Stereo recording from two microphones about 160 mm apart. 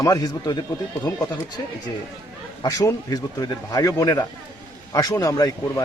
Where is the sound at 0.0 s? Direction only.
25° left (ahead or behind).